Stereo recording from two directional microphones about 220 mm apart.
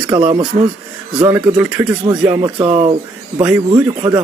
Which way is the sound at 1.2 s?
10° right (ahead or behind).